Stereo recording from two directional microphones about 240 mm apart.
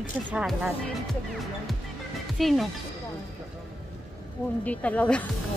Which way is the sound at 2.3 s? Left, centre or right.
Centre.